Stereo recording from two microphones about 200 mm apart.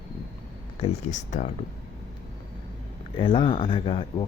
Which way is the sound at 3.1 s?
25° left (ahead or behind).